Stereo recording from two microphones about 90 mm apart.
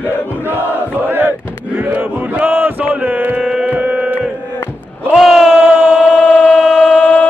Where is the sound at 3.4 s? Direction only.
10° right (ahead or behind).